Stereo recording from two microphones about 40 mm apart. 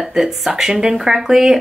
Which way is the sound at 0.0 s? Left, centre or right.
Centre.